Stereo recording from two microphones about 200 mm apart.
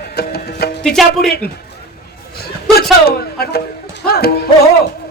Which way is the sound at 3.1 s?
50° left (ahead or behind).